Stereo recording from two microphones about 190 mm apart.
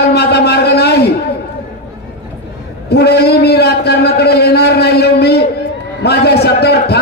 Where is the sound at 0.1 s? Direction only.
55° left (ahead or behind).